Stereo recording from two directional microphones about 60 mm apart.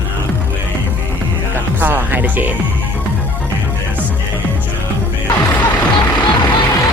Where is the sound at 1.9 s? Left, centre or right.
Right.